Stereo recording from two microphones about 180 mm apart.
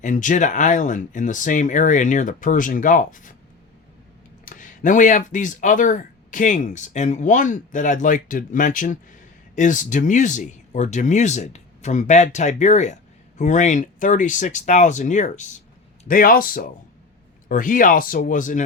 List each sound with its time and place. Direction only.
0.0 s speech: 45° left (ahead or behind)
4.4 s speech: 45° left (ahead or behind)